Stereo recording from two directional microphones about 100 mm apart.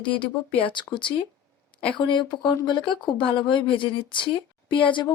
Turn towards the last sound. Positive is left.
turn(degrees=55)  # may be behind; listen again after turning